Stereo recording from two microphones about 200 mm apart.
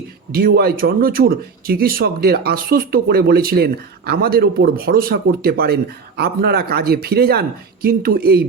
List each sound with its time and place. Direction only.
0.3 s speech: 50° right (ahead or behind)